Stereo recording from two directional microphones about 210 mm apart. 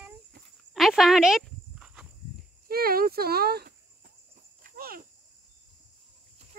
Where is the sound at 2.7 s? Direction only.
45° right (ahead or behind).